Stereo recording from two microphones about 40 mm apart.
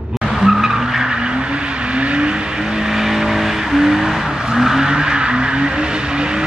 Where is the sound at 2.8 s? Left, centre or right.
Centre.